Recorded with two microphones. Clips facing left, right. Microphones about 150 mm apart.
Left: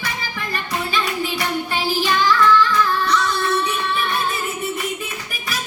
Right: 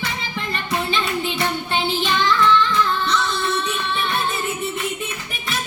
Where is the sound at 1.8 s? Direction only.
25° right (ahead or behind).